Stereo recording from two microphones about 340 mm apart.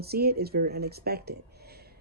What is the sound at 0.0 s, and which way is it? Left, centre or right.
Speech, right.